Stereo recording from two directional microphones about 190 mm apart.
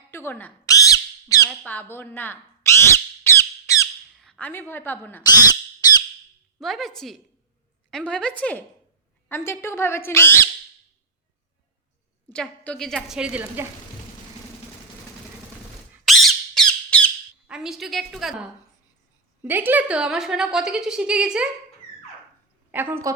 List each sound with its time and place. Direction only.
0.1 s squawk: 15° left (ahead or behind)
4.1 s a woman's voice: centre (ahead or behind)
5.2 s a sound: 20° left (ahead or behind)
6.6 s a woman's voice: centre (ahead or behind)
12.3 s a woman's voice: 5° left (ahead or behind)
16.0 s squawk: centre (ahead or behind)
17.4 s a woman's voice: 5° right (ahead or behind)
22.7 s a woman's voice: 10° right (ahead or behind)